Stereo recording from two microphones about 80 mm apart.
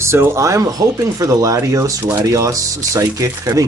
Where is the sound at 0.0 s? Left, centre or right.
Right.